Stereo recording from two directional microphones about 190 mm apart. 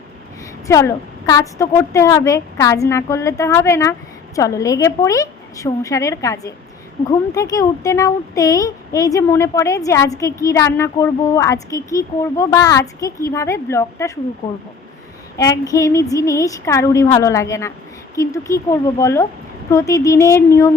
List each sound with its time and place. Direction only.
0.7 s speech: 15° left (ahead or behind)
15.4 s speech: 20° left (ahead or behind)